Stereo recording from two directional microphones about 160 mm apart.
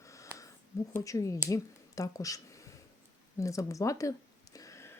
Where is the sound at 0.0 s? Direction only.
20° left (ahead or behind).